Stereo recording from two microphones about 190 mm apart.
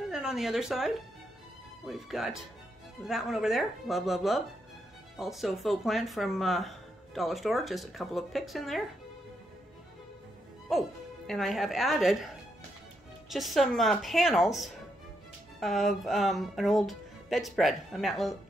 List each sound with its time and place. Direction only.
0.1 s speech: centre (ahead or behind)
10.7 s speech: centre (ahead or behind)
13.3 s speech: centre (ahead or behind)